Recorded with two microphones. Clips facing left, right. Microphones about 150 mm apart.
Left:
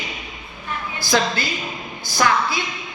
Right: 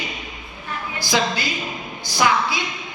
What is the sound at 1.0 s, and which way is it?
A woman's voice, 15° right (ahead or behind).